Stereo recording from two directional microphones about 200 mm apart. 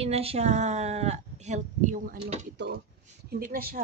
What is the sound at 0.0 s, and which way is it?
Speech, 30° right (ahead or behind).